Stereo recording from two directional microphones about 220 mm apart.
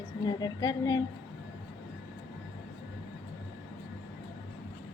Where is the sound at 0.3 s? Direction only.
20° left (ahead or behind).